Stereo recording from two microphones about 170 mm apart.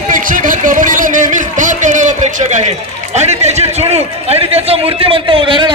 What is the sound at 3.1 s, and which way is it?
A man's voice, 40° right (ahead or behind).